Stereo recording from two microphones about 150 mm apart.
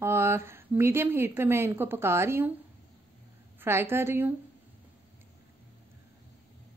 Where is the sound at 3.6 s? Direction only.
15° right (ahead or behind).